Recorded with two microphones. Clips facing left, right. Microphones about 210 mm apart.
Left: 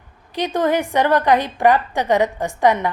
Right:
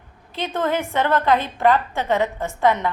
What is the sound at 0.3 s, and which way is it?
A woman's voice, 15° left (ahead or behind).